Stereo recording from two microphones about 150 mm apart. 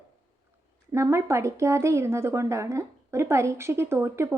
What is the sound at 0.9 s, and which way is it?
A woman's voice, 20° right (ahead or behind).